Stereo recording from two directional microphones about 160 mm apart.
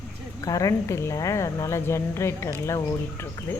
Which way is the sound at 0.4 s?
20° left (ahead or behind).